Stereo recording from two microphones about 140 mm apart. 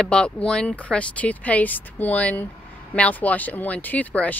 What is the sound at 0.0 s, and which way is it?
Speech, 5° left (ahead or behind).